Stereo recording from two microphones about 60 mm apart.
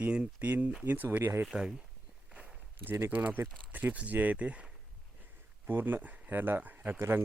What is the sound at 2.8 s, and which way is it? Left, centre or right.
Speech, right.